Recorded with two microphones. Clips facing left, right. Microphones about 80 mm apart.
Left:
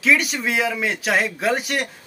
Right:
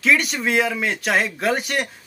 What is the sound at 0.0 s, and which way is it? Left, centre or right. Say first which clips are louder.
Speech: even; centre.